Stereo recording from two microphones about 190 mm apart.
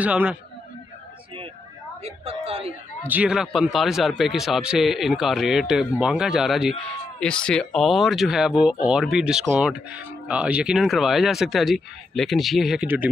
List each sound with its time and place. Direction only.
0.0 s a man's voice: 5° right (ahead or behind)
2.0 s a woman's voice: 30° right (ahead or behind)
3.1 s speech: 5° right (ahead or behind)